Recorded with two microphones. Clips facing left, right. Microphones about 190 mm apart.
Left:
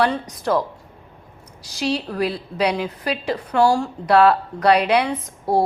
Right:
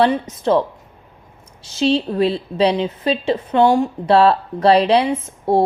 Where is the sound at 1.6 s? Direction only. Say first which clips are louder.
Right 6 dB; 25° right (ahead or behind).